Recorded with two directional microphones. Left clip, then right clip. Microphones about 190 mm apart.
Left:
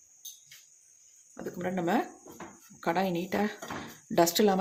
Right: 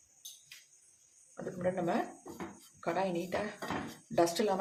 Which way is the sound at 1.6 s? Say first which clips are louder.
Left 3 dB; 55° left (ahead or behind).